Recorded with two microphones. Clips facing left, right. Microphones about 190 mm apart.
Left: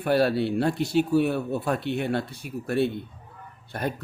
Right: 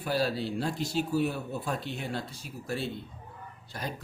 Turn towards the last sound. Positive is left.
turn(degrees=55)  # may be behind; listen again after turning